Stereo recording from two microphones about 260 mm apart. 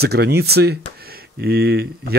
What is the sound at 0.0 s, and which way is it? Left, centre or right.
Speech, right.